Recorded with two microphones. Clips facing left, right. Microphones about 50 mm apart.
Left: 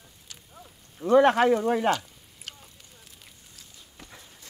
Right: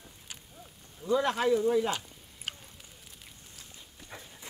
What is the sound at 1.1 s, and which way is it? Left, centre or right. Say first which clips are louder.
Speech: left 8 dB; left.